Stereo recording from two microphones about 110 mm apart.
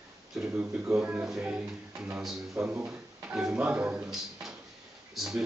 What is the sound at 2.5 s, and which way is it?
Speech, 25° right (ahead or behind).